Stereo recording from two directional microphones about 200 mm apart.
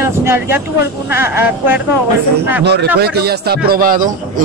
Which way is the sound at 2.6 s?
55° right (ahead or behind).